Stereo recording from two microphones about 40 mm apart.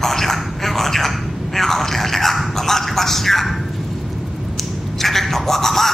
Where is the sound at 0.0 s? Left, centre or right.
Centre.